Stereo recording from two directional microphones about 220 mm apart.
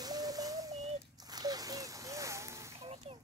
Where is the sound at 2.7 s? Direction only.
25° right (ahead or behind).